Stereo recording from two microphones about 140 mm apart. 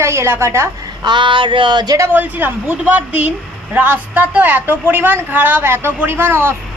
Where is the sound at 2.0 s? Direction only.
10° right (ahead or behind).